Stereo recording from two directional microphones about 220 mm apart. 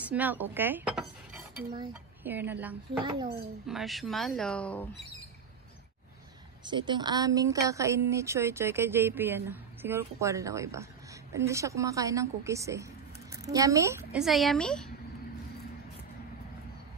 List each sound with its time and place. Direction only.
0.0 s cutlery: 5° right (ahead or behind)
2.2 s speech: 10° right (ahead or behind)
3.0 s a child's voice: 20° right (ahead or behind)
3.6 s speech: centre (ahead or behind)
6.6 s a woman's voice: 20° right (ahead or behind)
14.2 s speech: centre (ahead or behind)